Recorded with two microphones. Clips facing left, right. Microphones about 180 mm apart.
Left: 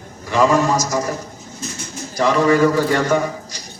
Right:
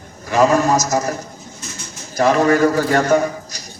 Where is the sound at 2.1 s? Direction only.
45° right (ahead or behind).